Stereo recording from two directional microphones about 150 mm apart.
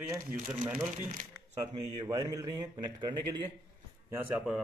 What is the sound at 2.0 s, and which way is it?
A man's voice, 25° right (ahead or behind).